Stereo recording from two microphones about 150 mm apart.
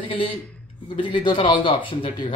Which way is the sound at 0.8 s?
35° left (ahead or behind).